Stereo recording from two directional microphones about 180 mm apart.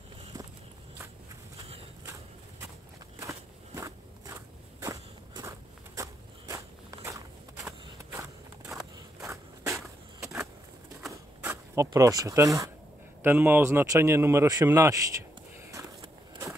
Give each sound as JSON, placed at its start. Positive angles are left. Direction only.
{"t": 3.2, "sound": "walk", "side_deg": -15}
{"t": 9.2, "sound": "a sound", "side_deg": -15}
{"t": 13.2, "sound": "speech", "side_deg": -10}